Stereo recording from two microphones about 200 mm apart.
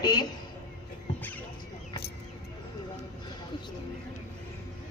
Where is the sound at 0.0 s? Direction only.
20° left (ahead or behind).